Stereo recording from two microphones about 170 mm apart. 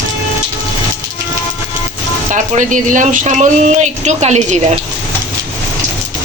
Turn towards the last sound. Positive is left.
turn(degrees=-40)  # may be behind; listen again after turning